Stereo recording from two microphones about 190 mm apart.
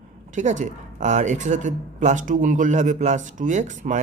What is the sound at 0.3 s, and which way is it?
A woman's voice, 40° right (ahead or behind).